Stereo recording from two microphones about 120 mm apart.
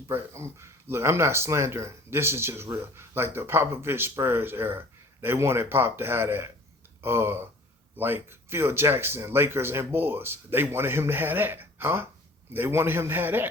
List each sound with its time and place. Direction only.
0.1 s speech: 25° right (ahead or behind)